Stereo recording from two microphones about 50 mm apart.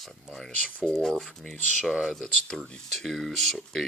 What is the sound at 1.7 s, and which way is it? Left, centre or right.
Speech, centre.